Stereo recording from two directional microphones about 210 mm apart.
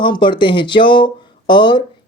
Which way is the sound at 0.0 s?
20° left (ahead or behind).